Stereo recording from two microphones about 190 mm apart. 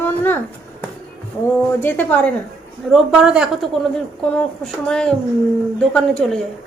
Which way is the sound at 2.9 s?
5° right (ahead or behind).